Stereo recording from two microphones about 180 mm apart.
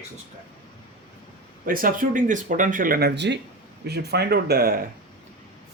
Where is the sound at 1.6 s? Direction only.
50° right (ahead or behind).